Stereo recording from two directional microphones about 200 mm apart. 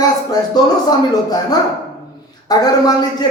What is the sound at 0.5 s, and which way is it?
Speech, 20° left (ahead or behind).